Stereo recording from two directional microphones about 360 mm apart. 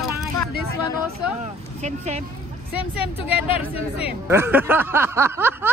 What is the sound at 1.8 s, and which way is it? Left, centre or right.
Speech, centre.